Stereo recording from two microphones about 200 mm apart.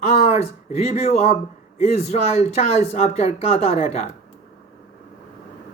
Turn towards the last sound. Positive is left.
turn(degrees=30)  # may be behind; listen again after turning